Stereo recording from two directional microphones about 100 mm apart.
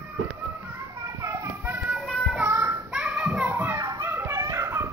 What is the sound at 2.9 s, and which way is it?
Children playing, 10° right (ahead or behind).